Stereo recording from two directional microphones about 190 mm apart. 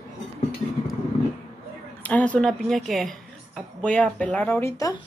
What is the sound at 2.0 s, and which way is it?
A woman's voice, 5° left (ahead or behind).